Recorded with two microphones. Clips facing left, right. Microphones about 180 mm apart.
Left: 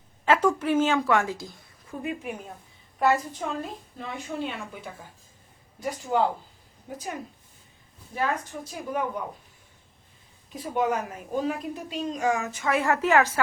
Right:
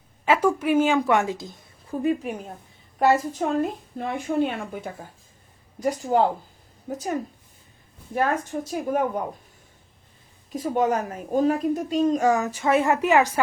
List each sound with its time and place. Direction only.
0.3 s a woman's voice: 10° right (ahead or behind)
1.9 s a woman's voice: 35° right (ahead or behind)
3.1 s a woman's voice: 45° right (ahead or behind)
8.7 s a woman's voice: 50° right (ahead or behind)
10.5 s a woman's voice: 40° right (ahead or behind); by 13.4 s 15° right (ahead or behind)